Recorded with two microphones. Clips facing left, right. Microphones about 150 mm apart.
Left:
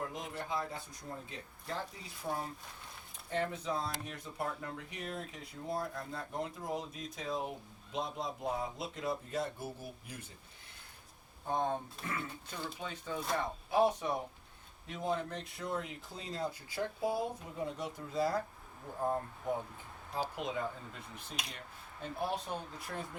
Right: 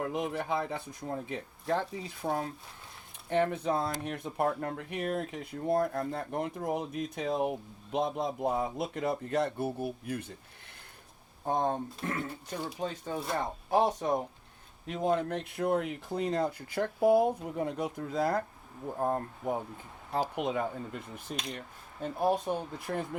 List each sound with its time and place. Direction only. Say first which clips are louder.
0.0 s speech: right 8 dB; 65° right (ahead or behind)
11.4 s speech: right 5 dB; 50° right (ahead or behind)
14.8 s speech: right 7 dB; 60° right (ahead or behind)